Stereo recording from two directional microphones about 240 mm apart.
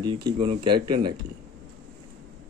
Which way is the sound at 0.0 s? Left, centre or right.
Centre.